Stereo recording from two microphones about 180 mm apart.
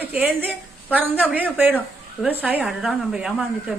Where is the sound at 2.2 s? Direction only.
10° right (ahead or behind).